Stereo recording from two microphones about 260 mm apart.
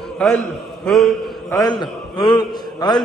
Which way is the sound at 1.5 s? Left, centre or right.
Centre.